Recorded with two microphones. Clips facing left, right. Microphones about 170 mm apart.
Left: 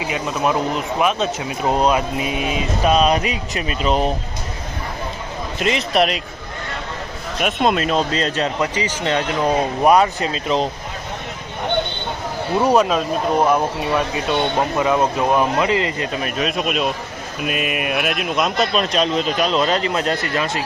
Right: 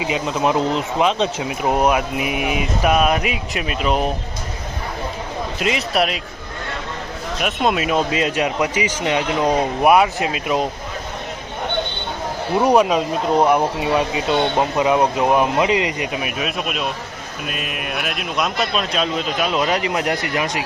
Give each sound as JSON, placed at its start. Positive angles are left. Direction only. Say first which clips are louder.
{"t": 0.0, "sound": "speech", "louder": "right 1 dB", "side_deg": -20}
{"t": 5.5, "sound": "a man's voice", "louder": "left 2 dB", "side_deg": -5}
{"t": 7.4, "sound": "speech", "louder": "left 1 dB", "side_deg": 0}
{"t": 12.5, "sound": "a man's voice", "louder": "right 1 dB", "side_deg": -15}